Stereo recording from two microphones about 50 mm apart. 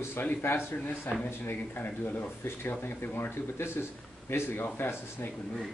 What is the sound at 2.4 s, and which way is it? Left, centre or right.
Speech, left.